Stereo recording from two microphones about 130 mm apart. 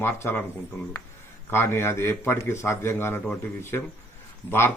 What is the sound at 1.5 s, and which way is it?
Speech, 20° left (ahead or behind).